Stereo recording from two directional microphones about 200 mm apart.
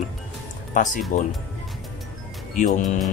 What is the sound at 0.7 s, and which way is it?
Speech, 40° left (ahead or behind).